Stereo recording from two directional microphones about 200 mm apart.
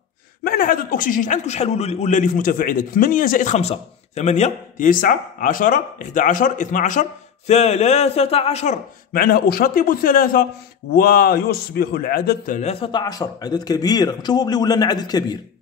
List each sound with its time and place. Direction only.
0.4 s a man's voice: 45° left (ahead or behind); by 8.7 s 30° left (ahead or behind)
9.1 s a man's voice: 50° left (ahead or behind); by 15.3 s 20° left (ahead or behind)